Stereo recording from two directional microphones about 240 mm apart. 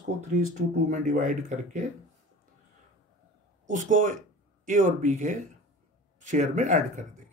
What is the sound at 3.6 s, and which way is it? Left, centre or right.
Speech, right.